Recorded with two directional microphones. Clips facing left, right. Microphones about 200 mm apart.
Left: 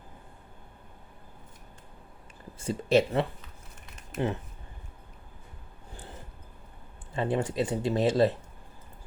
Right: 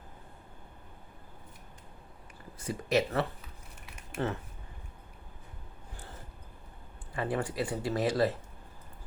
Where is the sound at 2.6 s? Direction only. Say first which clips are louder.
Left 5 dB; 25° left (ahead or behind).